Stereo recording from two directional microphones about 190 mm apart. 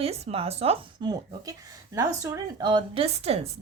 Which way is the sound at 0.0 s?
30° right (ahead or behind).